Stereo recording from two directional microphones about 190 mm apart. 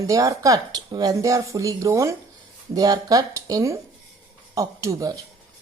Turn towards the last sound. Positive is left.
turn(degrees=-20)  # may be behind; listen again after turning